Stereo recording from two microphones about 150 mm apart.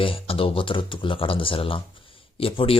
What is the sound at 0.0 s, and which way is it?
A man's voice, 40° left (ahead or behind).